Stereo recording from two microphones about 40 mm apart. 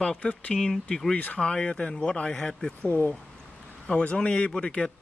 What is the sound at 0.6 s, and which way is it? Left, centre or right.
Speech, centre.